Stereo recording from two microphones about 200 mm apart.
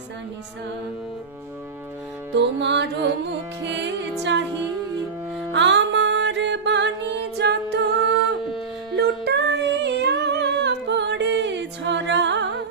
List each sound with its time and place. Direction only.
2.3 s music: 60° right (ahead or behind)
5.5 s music: 60° right (ahead or behind)
9.0 s female singing: 55° right (ahead or behind)